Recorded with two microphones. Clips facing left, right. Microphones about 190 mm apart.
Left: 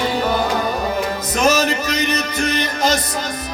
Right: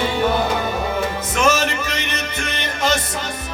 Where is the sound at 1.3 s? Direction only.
40° left (ahead or behind).